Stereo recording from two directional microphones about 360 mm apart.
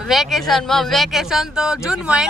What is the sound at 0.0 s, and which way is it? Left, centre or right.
Speech, centre.